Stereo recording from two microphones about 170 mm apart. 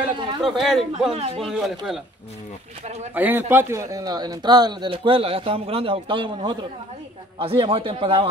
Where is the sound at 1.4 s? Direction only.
Centre (ahead or behind).